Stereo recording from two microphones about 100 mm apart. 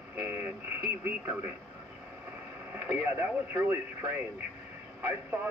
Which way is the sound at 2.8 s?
20° right (ahead or behind).